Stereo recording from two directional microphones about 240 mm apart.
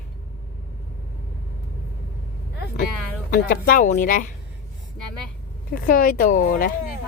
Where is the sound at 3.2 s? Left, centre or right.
Left.